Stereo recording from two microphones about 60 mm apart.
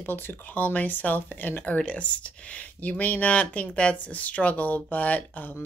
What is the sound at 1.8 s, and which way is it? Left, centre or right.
Speech, centre.